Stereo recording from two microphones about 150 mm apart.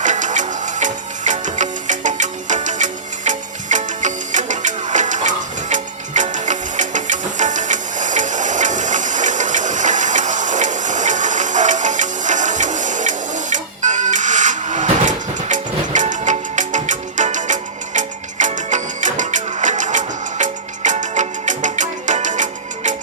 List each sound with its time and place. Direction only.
0.0 s music: 55° right (ahead or behind)